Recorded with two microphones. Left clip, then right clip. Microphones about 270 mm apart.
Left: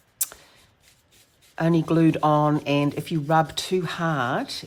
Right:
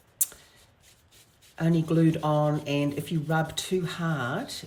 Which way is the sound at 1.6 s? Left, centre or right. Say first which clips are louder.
Left 5 dB; left.